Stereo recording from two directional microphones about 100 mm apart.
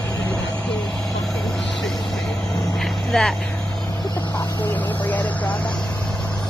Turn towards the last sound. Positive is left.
turn(degrees=15)  # may be behind; listen again after turning